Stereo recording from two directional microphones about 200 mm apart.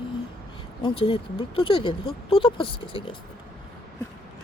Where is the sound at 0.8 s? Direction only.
25° left (ahead or behind).